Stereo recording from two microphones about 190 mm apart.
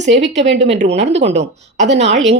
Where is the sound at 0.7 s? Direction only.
35° right (ahead or behind).